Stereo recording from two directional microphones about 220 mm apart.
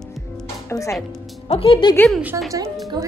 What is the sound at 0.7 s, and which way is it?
Music, 15° left (ahead or behind).